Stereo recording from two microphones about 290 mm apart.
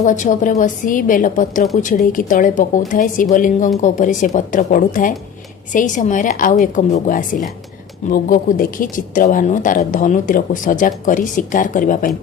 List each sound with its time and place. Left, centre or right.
0.0 s speech: left